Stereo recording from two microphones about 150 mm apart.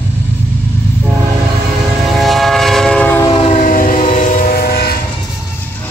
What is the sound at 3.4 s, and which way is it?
Train, 55° left (ahead or behind).